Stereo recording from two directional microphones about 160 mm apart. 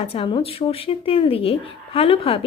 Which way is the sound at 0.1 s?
35° left (ahead or behind).